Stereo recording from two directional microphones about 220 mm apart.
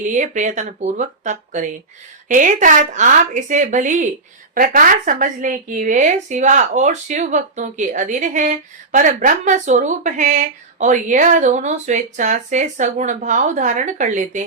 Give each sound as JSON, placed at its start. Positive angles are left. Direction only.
{"t": 0.1, "sound": "a woman's voice", "side_deg": -35}